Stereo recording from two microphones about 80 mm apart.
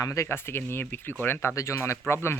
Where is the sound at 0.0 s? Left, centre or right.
Left.